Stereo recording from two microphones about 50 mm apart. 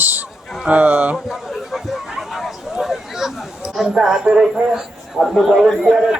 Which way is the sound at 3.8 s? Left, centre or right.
Centre.